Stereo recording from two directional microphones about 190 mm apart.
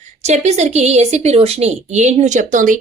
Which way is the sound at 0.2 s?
35° right (ahead or behind).